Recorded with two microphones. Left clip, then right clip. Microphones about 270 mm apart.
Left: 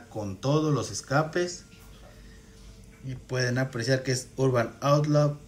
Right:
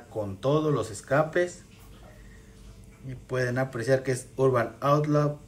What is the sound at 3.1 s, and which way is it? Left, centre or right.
Speech, centre.